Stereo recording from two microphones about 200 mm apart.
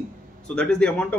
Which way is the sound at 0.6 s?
5° left (ahead or behind).